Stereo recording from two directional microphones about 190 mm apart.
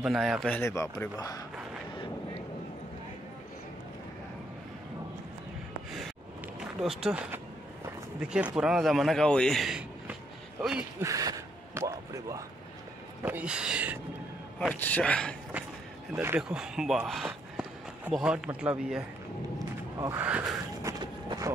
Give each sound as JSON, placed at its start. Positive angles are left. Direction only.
{"t": 0.0, "sound": "a man's voice", "side_deg": 0}
{"t": 0.6, "sound": "speech", "side_deg": 15}
{"t": 6.8, "sound": "a man's voice", "side_deg": 0}
{"t": 7.8, "sound": "a sound", "side_deg": -5}
{"t": 8.5, "sound": "a man's voice", "side_deg": -5}
{"t": 11.0, "sound": "speech", "side_deg": -20}
{"t": 13.2, "sound": "a sound", "side_deg": -10}
{"t": 14.7, "sound": "speech", "side_deg": 5}
{"t": 16.2, "sound": "a man's voice", "side_deg": -10}
{"t": 21.0, "sound": "vehicle", "side_deg": -25}